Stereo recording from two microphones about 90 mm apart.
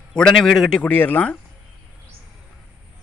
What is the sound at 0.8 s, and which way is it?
Speech, 20° left (ahead or behind).